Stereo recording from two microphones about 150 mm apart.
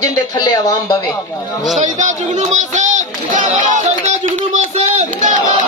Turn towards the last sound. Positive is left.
turn(degrees=-50)  # may be behind; listen again after turning